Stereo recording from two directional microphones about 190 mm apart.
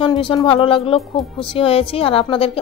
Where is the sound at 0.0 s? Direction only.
25° left (ahead or behind).